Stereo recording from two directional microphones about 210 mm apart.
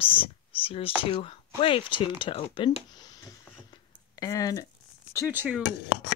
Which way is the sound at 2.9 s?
20° left (ahead or behind).